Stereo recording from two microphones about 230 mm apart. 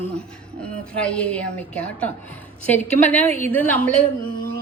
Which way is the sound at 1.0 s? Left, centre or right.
Centre.